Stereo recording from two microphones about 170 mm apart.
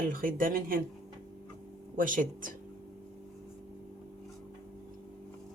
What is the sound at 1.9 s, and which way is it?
Speech, 50° right (ahead or behind).